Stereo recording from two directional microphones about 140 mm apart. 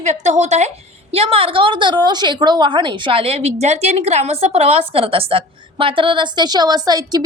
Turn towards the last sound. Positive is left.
turn(degrees=-30)  # may be behind; listen again after turning